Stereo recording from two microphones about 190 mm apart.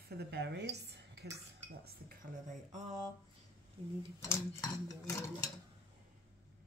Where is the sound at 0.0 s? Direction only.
55° right (ahead or behind); by 2.9 s 40° right (ahead or behind).